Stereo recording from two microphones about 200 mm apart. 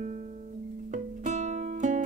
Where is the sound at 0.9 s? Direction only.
35° right (ahead or behind).